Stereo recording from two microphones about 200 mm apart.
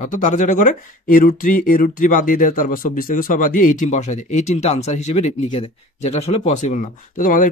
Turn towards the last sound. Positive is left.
turn(degrees=40)  # may be behind; listen again after turning